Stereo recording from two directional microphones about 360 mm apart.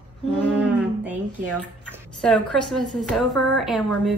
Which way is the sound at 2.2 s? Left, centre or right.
Centre.